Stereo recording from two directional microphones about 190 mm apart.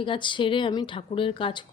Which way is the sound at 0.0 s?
25° left (ahead or behind).